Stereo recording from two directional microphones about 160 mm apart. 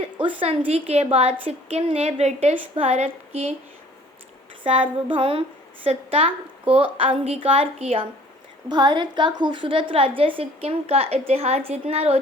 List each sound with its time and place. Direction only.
0.2 s a woman's voice: 35° right (ahead or behind)
4.6 s a woman's voice: 35° right (ahead or behind)
8.7 s a woman's voice: 30° right (ahead or behind)